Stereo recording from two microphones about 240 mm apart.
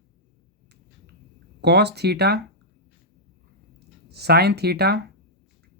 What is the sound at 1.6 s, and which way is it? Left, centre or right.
Speech, right.